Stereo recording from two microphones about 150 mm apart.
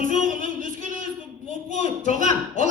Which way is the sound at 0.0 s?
60° right (ahead or behind).